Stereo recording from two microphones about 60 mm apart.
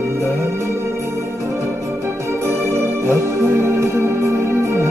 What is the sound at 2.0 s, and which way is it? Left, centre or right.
Music, right.